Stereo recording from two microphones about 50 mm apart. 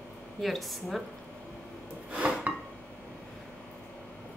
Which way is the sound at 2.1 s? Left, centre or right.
Right.